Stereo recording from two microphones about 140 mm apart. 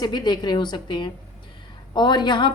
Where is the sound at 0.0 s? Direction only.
30° left (ahead or behind).